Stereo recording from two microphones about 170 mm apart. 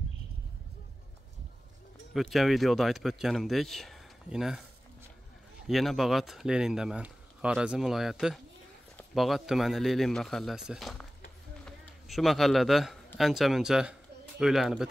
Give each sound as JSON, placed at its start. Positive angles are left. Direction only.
{"t": 2.1, "sound": "speech", "side_deg": 0}
{"t": 5.7, "sound": "speech", "side_deg": 0}
{"t": 11.6, "sound": "run", "side_deg": 0}
{"t": 13.2, "sound": "speech", "side_deg": 0}